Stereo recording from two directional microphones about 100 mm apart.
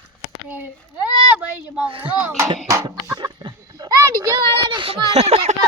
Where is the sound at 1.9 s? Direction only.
60° right (ahead or behind).